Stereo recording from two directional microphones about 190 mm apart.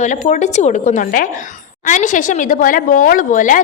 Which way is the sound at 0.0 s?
40° left (ahead or behind).